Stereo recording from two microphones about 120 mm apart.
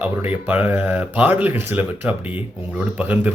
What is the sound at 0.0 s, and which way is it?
Speech, 15° right (ahead or behind).